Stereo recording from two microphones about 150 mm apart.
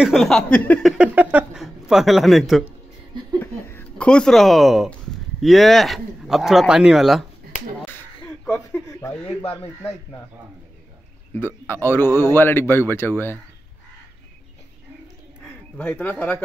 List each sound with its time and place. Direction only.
0.0 s speech: centre (ahead or behind)
0.9 s speech: 10° right (ahead or behind)
3.3 s speech: 15° left (ahead or behind)
8.3 s a sound: 10° left (ahead or behind)
9.2 s speech: 45° left (ahead or behind)
11.3 s speech: 15° left (ahead or behind)
15.4 s a sound: 10° left (ahead or behind)